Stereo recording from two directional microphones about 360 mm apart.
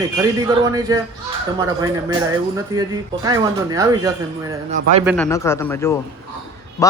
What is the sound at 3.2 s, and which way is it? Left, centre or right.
A man's voice, centre.